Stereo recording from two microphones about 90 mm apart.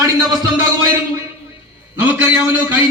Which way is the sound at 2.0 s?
20° right (ahead or behind).